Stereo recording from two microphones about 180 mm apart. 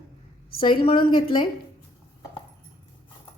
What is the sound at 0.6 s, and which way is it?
Speech, 30° left (ahead or behind).